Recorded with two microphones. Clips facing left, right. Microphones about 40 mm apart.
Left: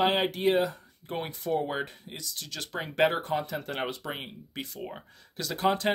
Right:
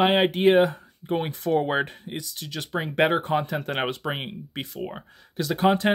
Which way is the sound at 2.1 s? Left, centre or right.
Right.